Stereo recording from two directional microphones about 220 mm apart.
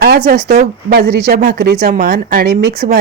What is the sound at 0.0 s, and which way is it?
Speech, 45° right (ahead or behind).